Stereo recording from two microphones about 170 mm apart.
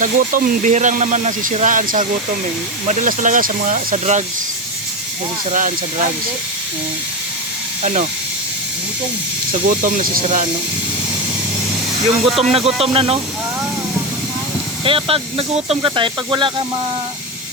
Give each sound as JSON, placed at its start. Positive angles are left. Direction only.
{"t": 0.0, "sound": "speech", "side_deg": -50}
{"t": 5.5, "sound": "speech", "side_deg": -50}
{"t": 7.8, "sound": "speech", "side_deg": -40}
{"t": 9.5, "sound": "speech", "side_deg": -50}
{"t": 12.4, "sound": "speech", "side_deg": -35}
{"t": 14.8, "sound": "speech", "side_deg": -30}